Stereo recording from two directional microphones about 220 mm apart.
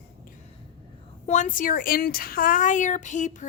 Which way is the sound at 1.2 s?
35° left (ahead or behind).